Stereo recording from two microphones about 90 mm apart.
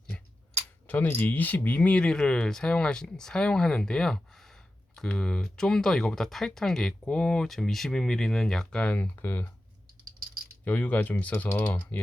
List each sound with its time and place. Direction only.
0.9 s speech: 20° left (ahead or behind)
10.7 s speech: 20° left (ahead or behind)